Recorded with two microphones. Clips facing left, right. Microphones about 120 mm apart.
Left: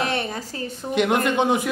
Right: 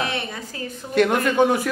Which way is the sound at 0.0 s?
40° left (ahead or behind).